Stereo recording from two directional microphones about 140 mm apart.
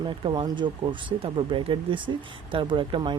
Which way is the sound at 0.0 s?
35° right (ahead or behind).